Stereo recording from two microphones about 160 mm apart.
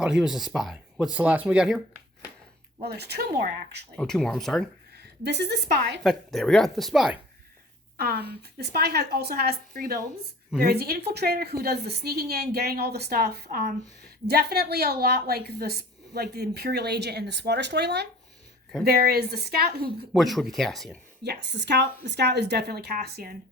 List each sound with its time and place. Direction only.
0.0 s speech: 5° right (ahead or behind)
2.8 s a woman's voice: 90° right
3.9 s speech: 5° left (ahead or behind)
5.2 s a woman's voice: 90° right
6.0 s speech: centre (ahead or behind)
7.9 s speech: 75° right (ahead or behind)
8.3 s a woman's voice: 85° right
18.9 s a woman's voice: 70° right (ahead or behind)
20.1 s speech: centre (ahead or behind)
21.4 s a woman's voice: 90° right